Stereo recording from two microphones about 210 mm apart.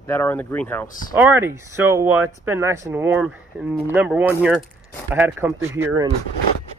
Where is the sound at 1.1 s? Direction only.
10° right (ahead or behind).